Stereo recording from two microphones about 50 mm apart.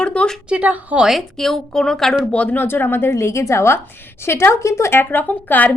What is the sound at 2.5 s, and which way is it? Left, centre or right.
A woman's voice, left.